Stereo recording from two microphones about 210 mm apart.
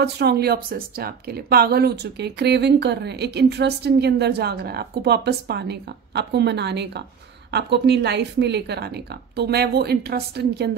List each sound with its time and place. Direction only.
0.0 s a woman's voice: 50° right (ahead or behind)